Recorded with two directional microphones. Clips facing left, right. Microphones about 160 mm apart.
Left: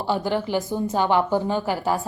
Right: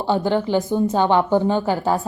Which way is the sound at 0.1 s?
25° right (ahead or behind).